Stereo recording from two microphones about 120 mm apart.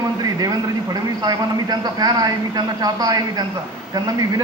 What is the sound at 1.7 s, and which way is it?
A man's voice, 35° right (ahead or behind).